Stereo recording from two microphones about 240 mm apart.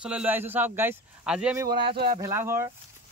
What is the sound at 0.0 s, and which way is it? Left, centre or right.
Speech, centre.